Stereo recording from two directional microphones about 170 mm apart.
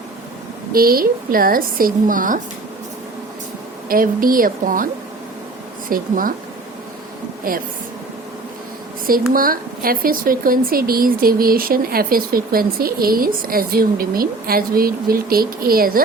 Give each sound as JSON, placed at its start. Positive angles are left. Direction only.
{"t": 0.7, "sound": "speech", "side_deg": -60}
{"t": 3.8, "sound": "speech", "side_deg": -55}
{"t": 5.9, "sound": "speech", "side_deg": -55}
{"t": 7.5, "sound": "speech", "side_deg": -55}
{"t": 9.3, "sound": "speech", "side_deg": -55}